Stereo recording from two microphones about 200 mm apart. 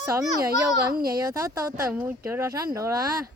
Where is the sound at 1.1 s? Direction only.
15° right (ahead or behind).